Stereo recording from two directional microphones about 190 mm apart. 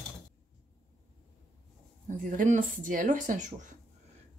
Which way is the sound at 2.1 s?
40° right (ahead or behind).